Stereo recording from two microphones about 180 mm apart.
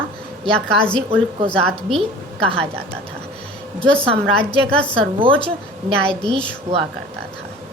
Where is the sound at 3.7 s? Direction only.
5° left (ahead or behind).